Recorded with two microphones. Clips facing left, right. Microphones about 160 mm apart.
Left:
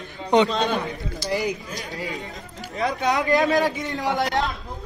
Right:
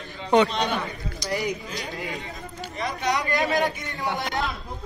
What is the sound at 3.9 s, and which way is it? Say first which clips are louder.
Speech: left 6 dB; 90° left.